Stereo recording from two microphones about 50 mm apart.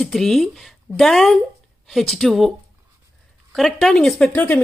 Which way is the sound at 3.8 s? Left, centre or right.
Centre.